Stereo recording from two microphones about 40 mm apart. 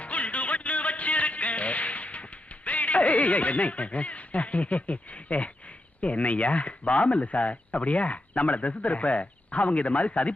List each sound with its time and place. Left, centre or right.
0.0 s music: left
6.0 s speech: left